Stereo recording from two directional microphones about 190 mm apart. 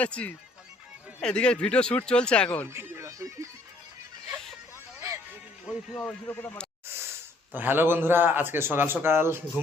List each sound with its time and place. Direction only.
0.0 s speech: 5° left (ahead or behind)
2.6 s music: 15° right (ahead or behind)
4.9 s music: 15° right (ahead or behind)
5.7 s speech: 5° right (ahead or behind)
6.0 s speech: 10° left (ahead or behind)
6.9 s breathing: 10° right (ahead or behind)
7.5 s a man's voice: 10° right (ahead or behind)